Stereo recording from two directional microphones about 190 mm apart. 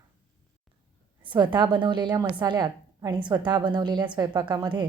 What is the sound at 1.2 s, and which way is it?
A woman's voice, 25° right (ahead or behind).